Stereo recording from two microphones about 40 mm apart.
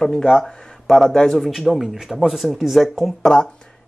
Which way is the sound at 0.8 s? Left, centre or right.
Centre.